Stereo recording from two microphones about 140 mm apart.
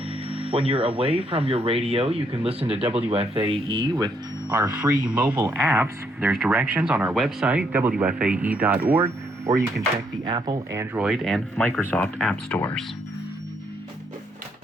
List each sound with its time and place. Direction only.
0.3 s speech: 45° right (ahead or behind)
4.4 s speech: 15° right (ahead or behind)
10.2 s speech: 30° right (ahead or behind)
10.9 s speech: 5° right (ahead or behind); by 12.8 s 15° left (ahead or behind)